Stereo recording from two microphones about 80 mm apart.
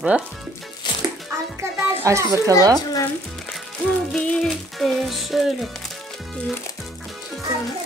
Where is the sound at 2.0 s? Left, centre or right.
Right.